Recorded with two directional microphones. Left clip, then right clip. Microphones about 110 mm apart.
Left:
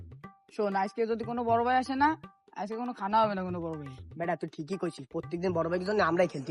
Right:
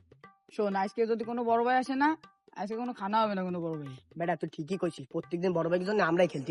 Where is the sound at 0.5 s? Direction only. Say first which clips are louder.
Even; 15° left (ahead or behind).